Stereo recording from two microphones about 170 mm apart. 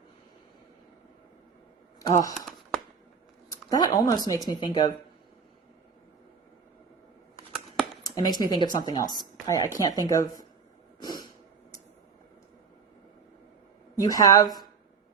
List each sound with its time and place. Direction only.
2.0 s speech: 20° left (ahead or behind)
3.7 s speech: 20° left (ahead or behind)
8.0 s speech: 20° left (ahead or behind)
11.0 s a sound: 25° left (ahead or behind)
14.0 s speech: 20° left (ahead or behind)